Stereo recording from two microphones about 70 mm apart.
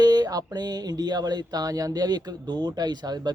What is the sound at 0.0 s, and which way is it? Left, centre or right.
Speech, right.